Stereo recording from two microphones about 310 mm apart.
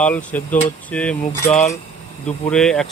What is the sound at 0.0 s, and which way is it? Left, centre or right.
Speech, centre.